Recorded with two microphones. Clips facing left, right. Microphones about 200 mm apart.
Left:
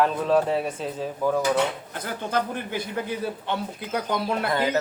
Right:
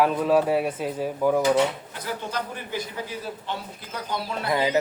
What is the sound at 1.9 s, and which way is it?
A man's voice, 55° left (ahead or behind).